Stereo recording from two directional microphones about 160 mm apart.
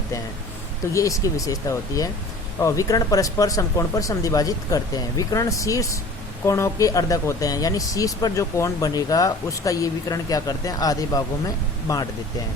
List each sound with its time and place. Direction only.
0.9 s speech: 20° left (ahead or behind)